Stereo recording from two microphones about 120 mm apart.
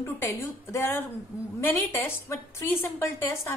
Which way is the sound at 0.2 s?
25° left (ahead or behind).